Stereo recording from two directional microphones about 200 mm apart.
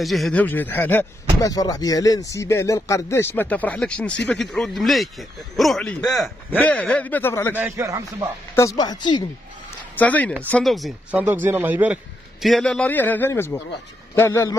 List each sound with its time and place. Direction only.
0.0 s speech: centre (ahead or behind)
7.5 s speech: 10° right (ahead or behind)
8.5 s speech: 20° left (ahead or behind)
9.9 s speech: 5° left (ahead or behind)